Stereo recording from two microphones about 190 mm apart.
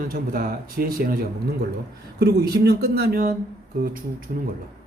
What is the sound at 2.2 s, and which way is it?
A man's voice, 60° right (ahead or behind).